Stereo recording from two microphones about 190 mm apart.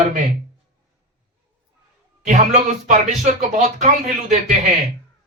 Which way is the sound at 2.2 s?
40° right (ahead or behind).